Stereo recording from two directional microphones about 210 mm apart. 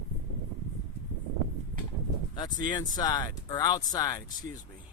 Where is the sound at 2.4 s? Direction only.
20° left (ahead or behind).